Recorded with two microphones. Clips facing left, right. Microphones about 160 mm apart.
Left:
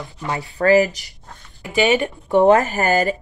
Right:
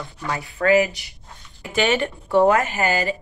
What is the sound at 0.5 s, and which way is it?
Speech, 40° left (ahead or behind).